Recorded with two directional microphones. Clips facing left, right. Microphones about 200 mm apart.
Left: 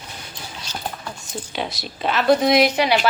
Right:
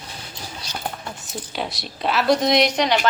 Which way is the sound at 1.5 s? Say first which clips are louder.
Left 1 dB; centre (ahead or behind).